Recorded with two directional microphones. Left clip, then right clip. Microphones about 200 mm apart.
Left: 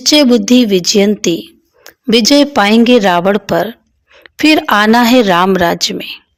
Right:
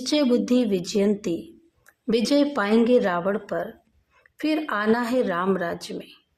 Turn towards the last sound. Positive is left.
turn(degrees=45)  # may be behind; listen again after turning